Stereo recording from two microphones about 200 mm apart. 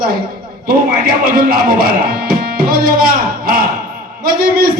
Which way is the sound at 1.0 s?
45° right (ahead or behind).